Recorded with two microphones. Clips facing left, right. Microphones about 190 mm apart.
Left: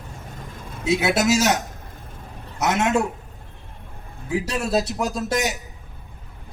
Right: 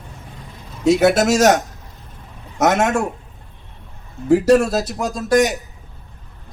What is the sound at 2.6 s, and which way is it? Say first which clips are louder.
Speech: right 5 dB; 65° right (ahead or behind).